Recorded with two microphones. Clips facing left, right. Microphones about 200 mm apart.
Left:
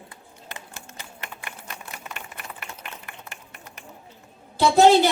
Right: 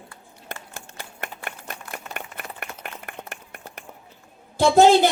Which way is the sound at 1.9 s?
55° right (ahead or behind).